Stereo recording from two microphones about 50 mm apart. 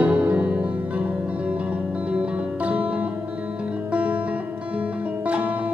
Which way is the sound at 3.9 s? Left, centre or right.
Right.